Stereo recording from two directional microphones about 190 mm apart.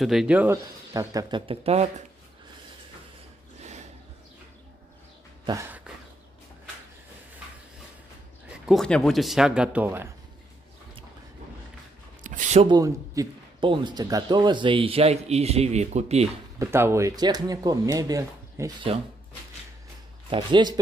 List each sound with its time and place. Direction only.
0.0 s a man's voice: centre (ahead or behind); by 2.0 s 35° right (ahead or behind)
5.5 s a sound: 15° right (ahead or behind)
8.5 s speech: centre (ahead or behind)
12.2 s a sound: 40° right (ahead or behind)
12.6 s a man's voice: 20° right (ahead or behind); by 16.3 s 35° right (ahead or behind)
16.5 s a man's voice: 15° right (ahead or behind)
20.2 s a man's voice: 25° right (ahead or behind)